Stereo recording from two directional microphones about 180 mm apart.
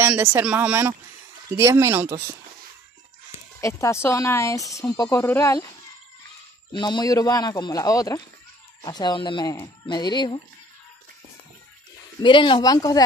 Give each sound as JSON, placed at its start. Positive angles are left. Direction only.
{"t": 0.0, "sound": "speech", "side_deg": -10}
{"t": 3.6, "sound": "speech", "side_deg": 15}
{"t": 6.7, "sound": "speech", "side_deg": 25}
{"t": 12.2, "sound": "speech", "side_deg": 25}